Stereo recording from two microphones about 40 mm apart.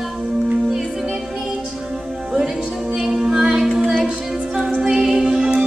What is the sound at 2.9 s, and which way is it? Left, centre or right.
Music, centre.